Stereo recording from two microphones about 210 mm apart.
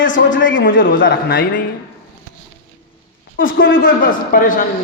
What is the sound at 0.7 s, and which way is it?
Speech, 40° left (ahead or behind).